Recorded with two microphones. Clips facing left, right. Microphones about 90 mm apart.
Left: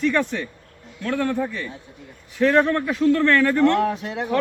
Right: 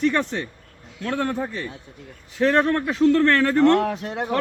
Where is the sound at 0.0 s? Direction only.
35° right (ahead or behind).